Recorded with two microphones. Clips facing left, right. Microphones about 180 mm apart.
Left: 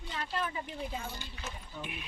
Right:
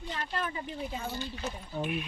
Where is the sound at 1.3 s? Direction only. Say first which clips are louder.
Right 7 dB; 35° right (ahead or behind).